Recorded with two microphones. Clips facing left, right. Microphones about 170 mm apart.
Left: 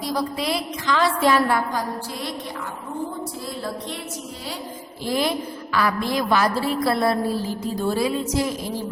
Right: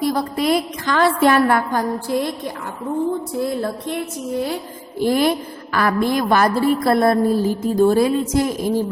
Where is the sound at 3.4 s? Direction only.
55° right (ahead or behind).